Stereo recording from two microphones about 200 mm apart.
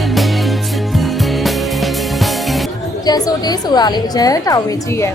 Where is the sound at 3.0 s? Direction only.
20° left (ahead or behind).